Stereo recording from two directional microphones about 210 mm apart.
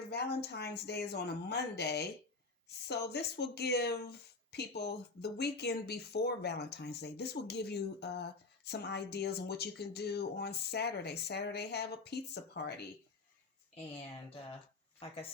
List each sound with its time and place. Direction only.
0.1 s speech: 50° left (ahead or behind)
14.9 s speech: 25° left (ahead or behind)